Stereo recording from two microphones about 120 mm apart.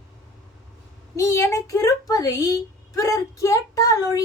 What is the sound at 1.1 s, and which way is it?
Speech, 25° left (ahead or behind).